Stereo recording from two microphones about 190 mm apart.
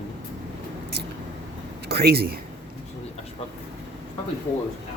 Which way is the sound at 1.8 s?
55° right (ahead or behind).